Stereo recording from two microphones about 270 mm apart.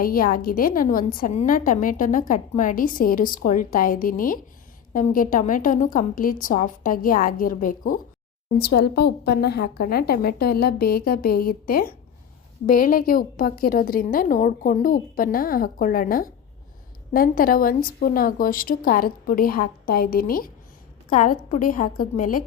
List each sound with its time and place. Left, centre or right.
0.0 s a woman's voice: left